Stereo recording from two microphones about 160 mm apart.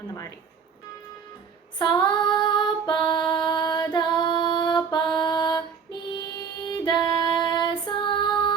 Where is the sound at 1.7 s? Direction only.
25° left (ahead or behind).